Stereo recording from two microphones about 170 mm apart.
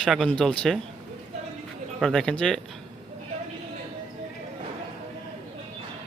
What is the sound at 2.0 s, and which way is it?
Speech, 5° left (ahead or behind).